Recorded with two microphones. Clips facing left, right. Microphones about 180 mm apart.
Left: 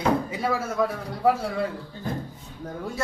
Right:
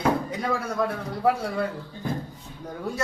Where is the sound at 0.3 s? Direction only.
5° left (ahead or behind).